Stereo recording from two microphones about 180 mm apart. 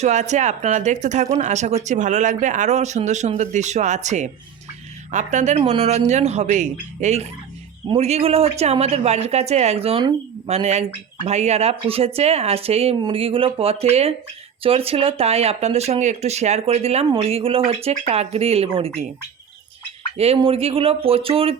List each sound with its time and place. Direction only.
0.0 s speech: 40° right (ahead or behind)
20.1 s speech: 35° right (ahead or behind)